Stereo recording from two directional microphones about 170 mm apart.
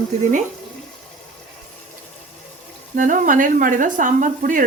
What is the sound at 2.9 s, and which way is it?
Speech, 50° right (ahead or behind).